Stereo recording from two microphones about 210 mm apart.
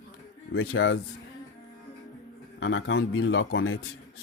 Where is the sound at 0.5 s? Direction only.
65° left (ahead or behind).